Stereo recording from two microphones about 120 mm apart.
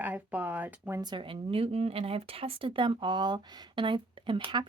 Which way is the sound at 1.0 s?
45° right (ahead or behind).